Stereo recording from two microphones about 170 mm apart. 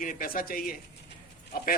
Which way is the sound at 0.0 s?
55° left (ahead or behind).